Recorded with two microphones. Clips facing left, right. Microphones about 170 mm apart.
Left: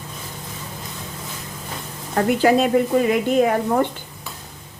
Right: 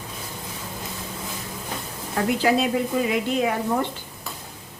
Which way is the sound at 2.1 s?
50° left (ahead or behind).